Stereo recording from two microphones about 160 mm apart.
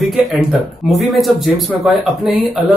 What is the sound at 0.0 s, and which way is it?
Speech, centre (ahead or behind).